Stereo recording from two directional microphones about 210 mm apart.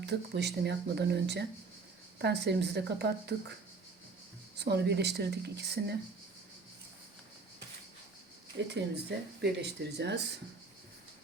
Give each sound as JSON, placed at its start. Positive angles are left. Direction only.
{"t": 0.0, "sound": "speech", "side_deg": -55}
{"t": 4.5, "sound": "speech", "side_deg": -55}
{"t": 8.7, "sound": "speech", "side_deg": -50}